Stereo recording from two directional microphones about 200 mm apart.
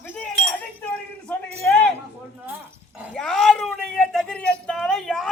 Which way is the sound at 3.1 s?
5° left (ahead or behind).